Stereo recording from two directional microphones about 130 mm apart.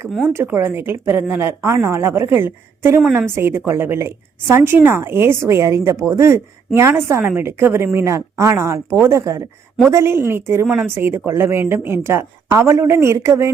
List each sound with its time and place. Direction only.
0.3 s a woman's voice: 20° right (ahead or behind)